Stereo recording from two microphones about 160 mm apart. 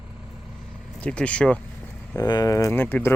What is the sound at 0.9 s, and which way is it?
Speech, 5° left (ahead or behind).